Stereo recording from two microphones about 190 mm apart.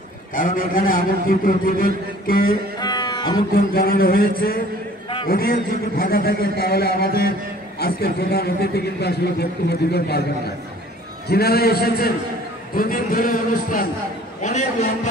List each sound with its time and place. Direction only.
0.3 s a man's voice: 45° left (ahead or behind)
2.8 s music: 20° left (ahead or behind)
3.5 s a man's voice: 50° left (ahead or behind)
11.2 s a man's voice: 55° left (ahead or behind); by 14.9 s 40° left (ahead or behind)